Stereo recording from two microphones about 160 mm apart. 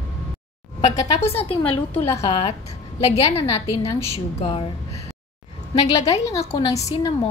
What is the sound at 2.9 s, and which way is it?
A woman's voice, 40° left (ahead or behind).